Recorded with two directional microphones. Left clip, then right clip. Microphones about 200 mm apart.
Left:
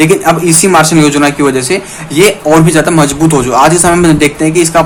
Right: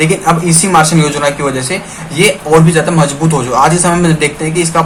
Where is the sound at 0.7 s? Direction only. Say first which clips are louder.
Left 1 dB; 45° left (ahead or behind).